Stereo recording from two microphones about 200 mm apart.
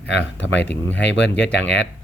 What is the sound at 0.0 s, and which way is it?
Speech, 60° left (ahead or behind).